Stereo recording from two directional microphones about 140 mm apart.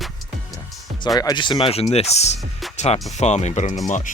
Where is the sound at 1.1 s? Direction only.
30° left (ahead or behind).